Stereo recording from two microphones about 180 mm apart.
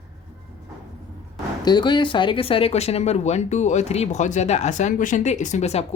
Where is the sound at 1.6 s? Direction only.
25° left (ahead or behind).